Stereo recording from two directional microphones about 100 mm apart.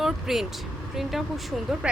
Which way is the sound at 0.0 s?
5° right (ahead or behind).